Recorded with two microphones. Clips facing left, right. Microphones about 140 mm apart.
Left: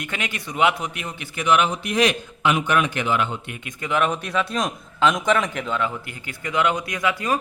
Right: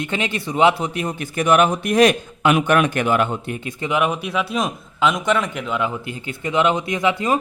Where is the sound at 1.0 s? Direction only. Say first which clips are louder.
Right 4 dB; 45° right (ahead or behind).